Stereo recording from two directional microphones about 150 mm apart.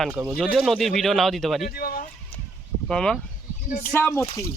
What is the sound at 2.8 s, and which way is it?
Speech, 5° left (ahead or behind).